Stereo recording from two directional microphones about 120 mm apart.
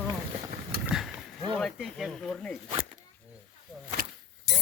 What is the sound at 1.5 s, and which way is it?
Speech, centre (ahead or behind).